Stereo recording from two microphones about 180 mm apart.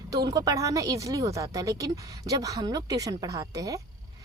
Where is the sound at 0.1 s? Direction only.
20° right (ahead or behind).